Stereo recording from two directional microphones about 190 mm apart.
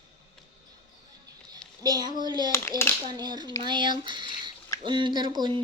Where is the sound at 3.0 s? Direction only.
20° right (ahead or behind).